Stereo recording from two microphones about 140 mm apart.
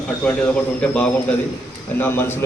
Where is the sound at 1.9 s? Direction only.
15° left (ahead or behind).